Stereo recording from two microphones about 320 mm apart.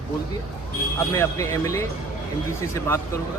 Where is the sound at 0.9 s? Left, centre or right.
Centre.